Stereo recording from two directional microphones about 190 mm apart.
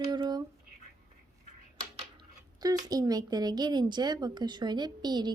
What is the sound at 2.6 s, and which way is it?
Speech, 20° right (ahead or behind).